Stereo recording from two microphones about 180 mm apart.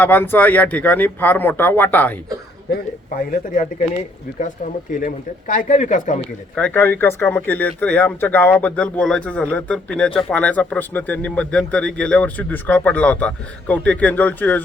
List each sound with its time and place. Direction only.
0.0 s speech: 10° left (ahead or behind)
3.2 s speech: 45° left (ahead or behind)
6.6 s speech: 10° left (ahead or behind)